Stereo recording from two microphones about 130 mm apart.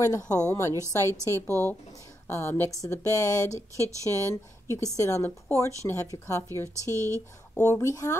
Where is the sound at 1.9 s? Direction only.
25° left (ahead or behind).